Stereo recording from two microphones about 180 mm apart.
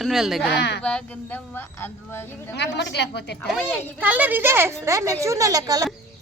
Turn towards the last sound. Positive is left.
turn(degrees=-20)  # may be behind; listen again after turning